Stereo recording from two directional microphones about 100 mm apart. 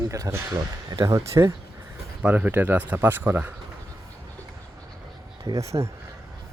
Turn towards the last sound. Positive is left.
turn(degrees=-30)  # may be behind; listen again after turning